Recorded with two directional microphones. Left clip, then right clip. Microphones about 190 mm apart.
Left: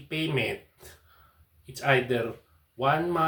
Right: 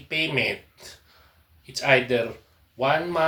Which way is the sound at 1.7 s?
20° left (ahead or behind).